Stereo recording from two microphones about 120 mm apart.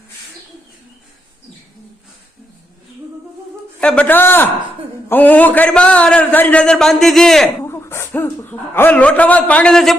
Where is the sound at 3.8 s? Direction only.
10° left (ahead or behind).